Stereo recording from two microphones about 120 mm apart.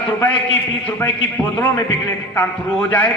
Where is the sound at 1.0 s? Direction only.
20° left (ahead or behind).